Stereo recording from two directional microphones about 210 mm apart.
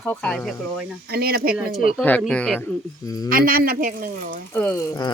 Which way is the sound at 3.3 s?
45° right (ahead or behind).